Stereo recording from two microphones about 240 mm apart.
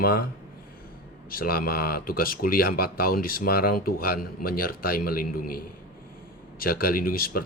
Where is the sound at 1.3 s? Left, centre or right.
Left.